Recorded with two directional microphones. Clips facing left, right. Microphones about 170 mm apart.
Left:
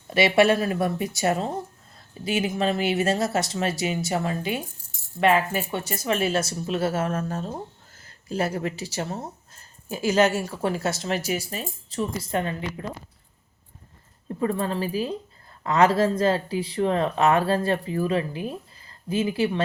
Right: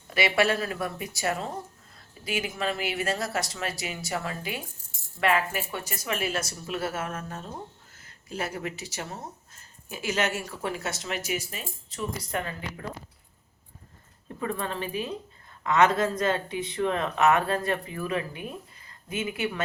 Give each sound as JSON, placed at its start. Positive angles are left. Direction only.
{"t": 0.1, "sound": "speech", "side_deg": 25}
{"t": 14.3, "sound": "speech", "side_deg": 30}